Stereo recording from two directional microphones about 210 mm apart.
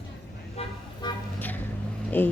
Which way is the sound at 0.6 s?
30° left (ahead or behind).